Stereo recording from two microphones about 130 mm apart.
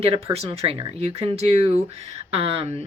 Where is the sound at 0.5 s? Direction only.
50° right (ahead or behind).